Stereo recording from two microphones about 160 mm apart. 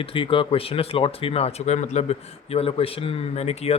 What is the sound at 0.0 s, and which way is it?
Speech, 35° left (ahead or behind).